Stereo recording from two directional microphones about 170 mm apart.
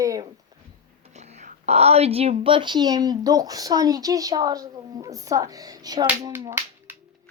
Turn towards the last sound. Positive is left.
turn(degrees=-25)  # may be behind; listen again after turning